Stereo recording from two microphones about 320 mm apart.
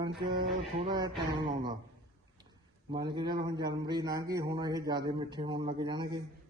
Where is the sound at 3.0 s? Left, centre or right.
Centre.